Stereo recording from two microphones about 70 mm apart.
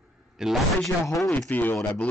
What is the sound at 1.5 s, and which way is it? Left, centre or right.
Speech, left.